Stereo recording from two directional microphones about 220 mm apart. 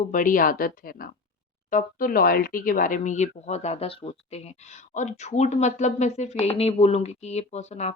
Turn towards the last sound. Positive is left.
turn(degrees=30)  # may be behind; listen again after turning